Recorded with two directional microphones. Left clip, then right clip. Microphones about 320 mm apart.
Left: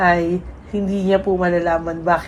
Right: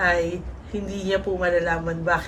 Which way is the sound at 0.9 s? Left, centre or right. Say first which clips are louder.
Left 7 dB; centre.